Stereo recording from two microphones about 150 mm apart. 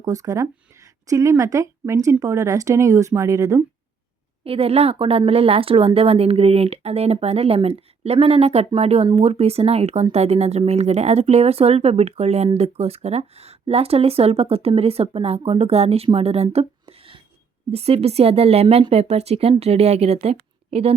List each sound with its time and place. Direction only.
0.0 s a woman's voice: 25° right (ahead or behind)
4.4 s speech: 40° right (ahead or behind)